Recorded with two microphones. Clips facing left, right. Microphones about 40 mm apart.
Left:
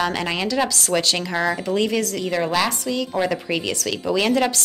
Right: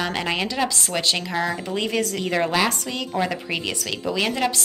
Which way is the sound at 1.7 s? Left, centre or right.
Centre.